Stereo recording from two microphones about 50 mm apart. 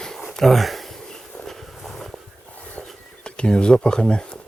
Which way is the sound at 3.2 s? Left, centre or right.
Centre.